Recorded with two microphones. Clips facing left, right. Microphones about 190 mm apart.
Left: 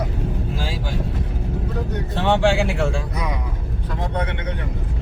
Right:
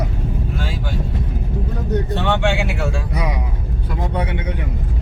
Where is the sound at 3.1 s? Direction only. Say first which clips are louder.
Right 3 dB; 10° right (ahead or behind).